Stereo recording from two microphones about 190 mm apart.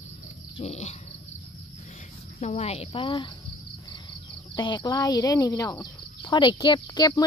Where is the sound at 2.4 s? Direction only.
35° left (ahead or behind).